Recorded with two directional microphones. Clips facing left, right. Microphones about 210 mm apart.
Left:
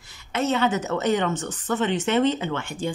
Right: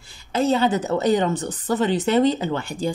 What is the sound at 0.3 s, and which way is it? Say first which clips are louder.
Speech: right 3 dB; 30° right (ahead or behind).